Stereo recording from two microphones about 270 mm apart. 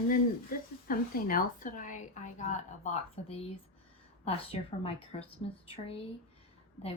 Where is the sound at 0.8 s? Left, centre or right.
Left.